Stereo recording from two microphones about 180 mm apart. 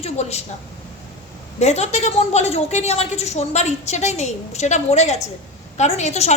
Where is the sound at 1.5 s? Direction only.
40° left (ahead or behind).